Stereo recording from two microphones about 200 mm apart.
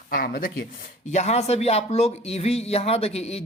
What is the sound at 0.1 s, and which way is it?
Speech, 45° left (ahead or behind).